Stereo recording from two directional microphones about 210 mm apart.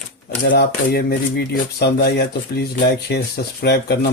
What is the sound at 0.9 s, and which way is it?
Speech, 50° left (ahead or behind).